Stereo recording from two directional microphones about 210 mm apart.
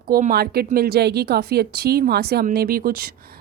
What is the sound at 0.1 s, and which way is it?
Speech, 45° right (ahead or behind).